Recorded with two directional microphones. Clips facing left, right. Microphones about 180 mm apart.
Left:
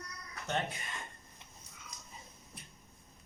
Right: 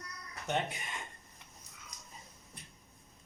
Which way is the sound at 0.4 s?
20° right (ahead or behind).